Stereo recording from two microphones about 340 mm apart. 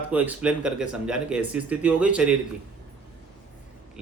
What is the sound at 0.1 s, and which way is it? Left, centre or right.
Speech, centre.